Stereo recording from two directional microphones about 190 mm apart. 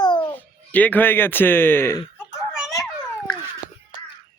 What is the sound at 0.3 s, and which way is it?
Speech, 10° left (ahead or behind).